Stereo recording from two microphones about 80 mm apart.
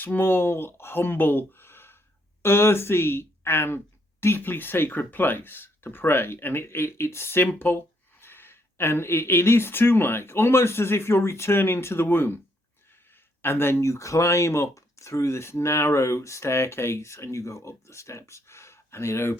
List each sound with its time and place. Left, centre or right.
0.0 s speech: left
13.4 s speech: left
13.9 s speech: left